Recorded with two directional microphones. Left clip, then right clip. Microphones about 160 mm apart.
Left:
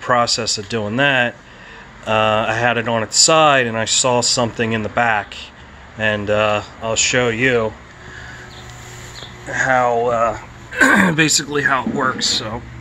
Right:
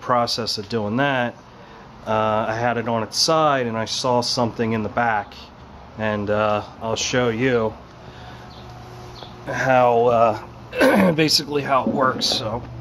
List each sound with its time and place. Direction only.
0.0 s speech: centre (ahead or behind)
9.5 s speech: 35° right (ahead or behind); by 10.4 s 50° right (ahead or behind)
10.8 s speech: centre (ahead or behind)